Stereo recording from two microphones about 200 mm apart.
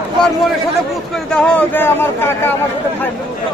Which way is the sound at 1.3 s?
5° left (ahead or behind).